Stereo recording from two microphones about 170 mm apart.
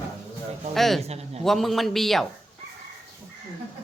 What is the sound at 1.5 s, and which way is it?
Speech, centre (ahead or behind).